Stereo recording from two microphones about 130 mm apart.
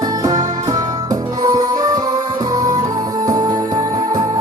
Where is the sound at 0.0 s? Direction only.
30° right (ahead or behind).